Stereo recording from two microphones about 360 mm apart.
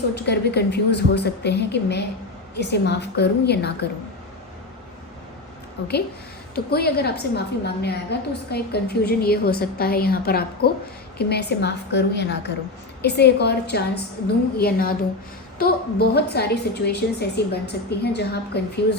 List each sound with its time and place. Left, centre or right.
0.1 s a woman's voice: left
6.5 s a woman's voice: left